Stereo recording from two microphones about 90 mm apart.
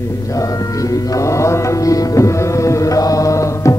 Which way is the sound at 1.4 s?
35° left (ahead or behind).